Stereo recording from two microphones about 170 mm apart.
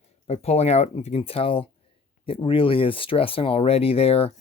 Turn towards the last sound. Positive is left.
turn(degrees=35)  # may be behind; listen again after turning